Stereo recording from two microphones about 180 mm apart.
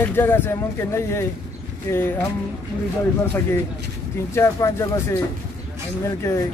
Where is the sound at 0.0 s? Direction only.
10° left (ahead or behind).